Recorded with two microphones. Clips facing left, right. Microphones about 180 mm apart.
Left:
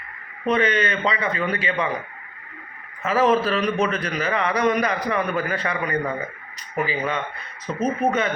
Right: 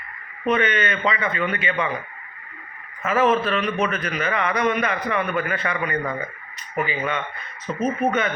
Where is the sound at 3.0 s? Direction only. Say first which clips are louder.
Left 1 dB; 35° left (ahead or behind).